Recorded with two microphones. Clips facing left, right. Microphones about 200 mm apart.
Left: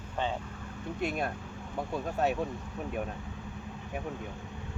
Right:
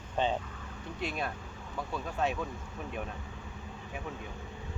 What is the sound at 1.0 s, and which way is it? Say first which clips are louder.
Speech: left 3 dB; 50° left (ahead or behind).